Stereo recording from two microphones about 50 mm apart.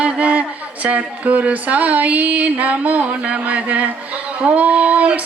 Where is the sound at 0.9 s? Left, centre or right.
Right.